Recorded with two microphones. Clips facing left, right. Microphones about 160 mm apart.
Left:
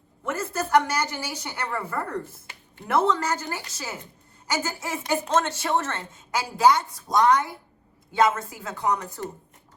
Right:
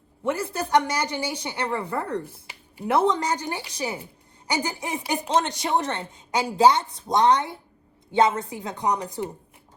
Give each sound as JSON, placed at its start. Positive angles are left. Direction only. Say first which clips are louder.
{"t": 0.3, "sound": "speech", "louder": "right 1 dB", "side_deg": -15}
{"t": 1.8, "sound": "a woman's voice", "louder": "right 2 dB", "side_deg": -15}